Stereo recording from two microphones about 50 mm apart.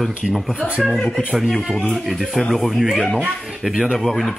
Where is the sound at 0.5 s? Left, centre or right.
Right.